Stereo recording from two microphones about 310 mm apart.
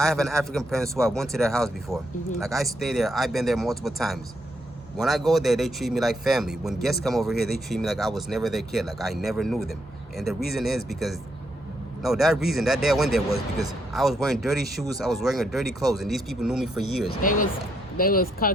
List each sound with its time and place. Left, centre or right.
0.0 s speech: centre
17.2 s speech: left